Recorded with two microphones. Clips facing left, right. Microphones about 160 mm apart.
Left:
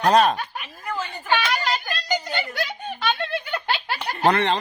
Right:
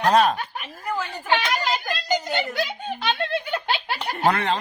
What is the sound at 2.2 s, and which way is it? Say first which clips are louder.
Snicker: right 3 dB; 15° right (ahead or behind).